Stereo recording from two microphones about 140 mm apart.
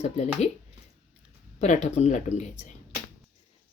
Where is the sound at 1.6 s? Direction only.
55° left (ahead or behind).